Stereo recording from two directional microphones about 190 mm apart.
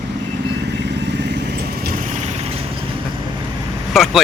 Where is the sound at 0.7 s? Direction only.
65° right (ahead or behind); by 2.6 s 35° right (ahead or behind).